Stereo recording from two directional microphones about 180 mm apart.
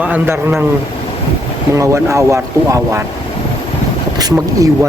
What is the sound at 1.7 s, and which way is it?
A man's voice, 15° right (ahead or behind).